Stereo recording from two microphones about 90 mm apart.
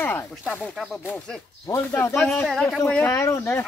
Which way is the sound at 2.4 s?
5° left (ahead or behind).